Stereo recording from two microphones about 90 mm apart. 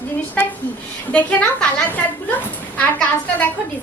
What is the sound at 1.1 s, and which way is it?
A woman's voice, 15° left (ahead or behind).